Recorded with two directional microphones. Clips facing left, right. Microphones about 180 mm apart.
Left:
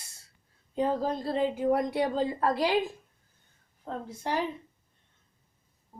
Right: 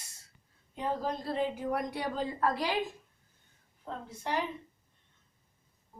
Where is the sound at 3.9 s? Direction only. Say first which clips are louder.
Left 4 dB; 40° left (ahead or behind).